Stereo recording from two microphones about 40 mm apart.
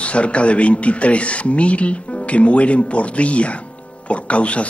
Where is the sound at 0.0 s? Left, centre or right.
Left.